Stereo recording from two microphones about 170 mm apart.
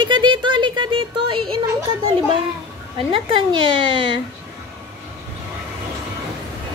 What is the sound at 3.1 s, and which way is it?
Speech, 30° right (ahead or behind).